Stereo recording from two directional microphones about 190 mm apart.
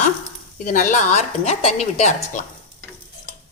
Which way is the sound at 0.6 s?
45° left (ahead or behind).